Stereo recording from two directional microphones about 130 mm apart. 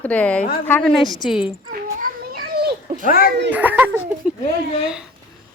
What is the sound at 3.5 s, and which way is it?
Speech, 15° right (ahead or behind).